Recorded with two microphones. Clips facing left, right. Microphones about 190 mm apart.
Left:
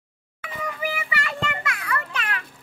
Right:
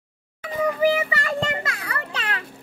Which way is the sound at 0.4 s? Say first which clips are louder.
Right 10 dB; 35° right (ahead or behind).